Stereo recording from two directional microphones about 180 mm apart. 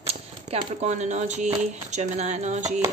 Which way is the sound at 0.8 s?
40° right (ahead or behind).